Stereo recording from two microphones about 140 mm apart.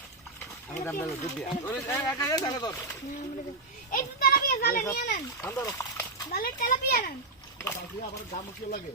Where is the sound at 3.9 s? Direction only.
90° left.